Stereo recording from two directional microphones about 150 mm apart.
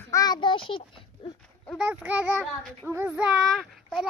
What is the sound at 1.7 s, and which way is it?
Child singing, 5° right (ahead or behind).